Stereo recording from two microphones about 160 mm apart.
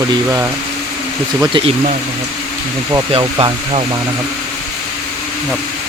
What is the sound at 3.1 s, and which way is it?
Speech, 35° right (ahead or behind).